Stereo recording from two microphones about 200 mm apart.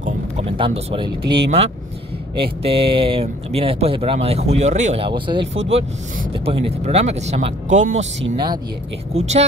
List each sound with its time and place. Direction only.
0.0 s a sound: 30° right (ahead or behind)
2.3 s speech: 25° right (ahead or behind)
9.1 s speech: 35° right (ahead or behind)